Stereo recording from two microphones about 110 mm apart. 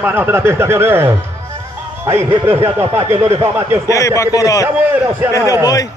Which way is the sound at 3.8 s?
30° left (ahead or behind).